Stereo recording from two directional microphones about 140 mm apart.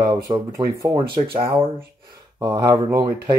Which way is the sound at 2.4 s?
25° right (ahead or behind).